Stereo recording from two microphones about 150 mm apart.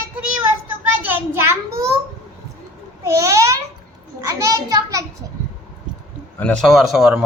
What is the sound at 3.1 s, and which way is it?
Babbling, 20° right (ahead or behind).